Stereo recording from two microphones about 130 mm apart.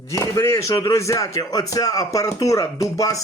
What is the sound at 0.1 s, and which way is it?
Speech, 25° left (ahead or behind).